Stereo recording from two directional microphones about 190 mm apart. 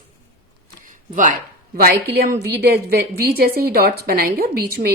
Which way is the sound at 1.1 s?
45° right (ahead or behind).